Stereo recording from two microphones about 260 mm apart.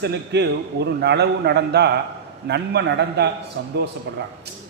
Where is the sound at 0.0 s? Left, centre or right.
Right.